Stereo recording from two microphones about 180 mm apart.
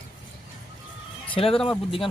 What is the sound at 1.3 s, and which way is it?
Speech, 30° left (ahead or behind).